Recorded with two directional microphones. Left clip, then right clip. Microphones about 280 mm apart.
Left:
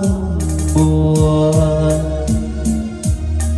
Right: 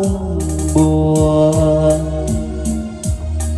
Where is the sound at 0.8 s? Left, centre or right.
Left.